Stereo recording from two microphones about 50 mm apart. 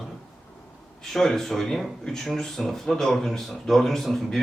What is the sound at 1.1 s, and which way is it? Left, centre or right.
Speech, centre.